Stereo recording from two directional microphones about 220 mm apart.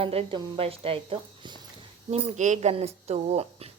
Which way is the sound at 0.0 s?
25° right (ahead or behind).